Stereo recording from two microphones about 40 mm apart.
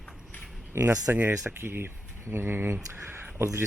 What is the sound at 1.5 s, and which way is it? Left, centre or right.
Speech, right.